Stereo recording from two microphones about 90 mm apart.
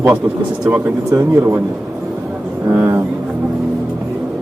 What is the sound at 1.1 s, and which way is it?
Speech, 35° right (ahead or behind).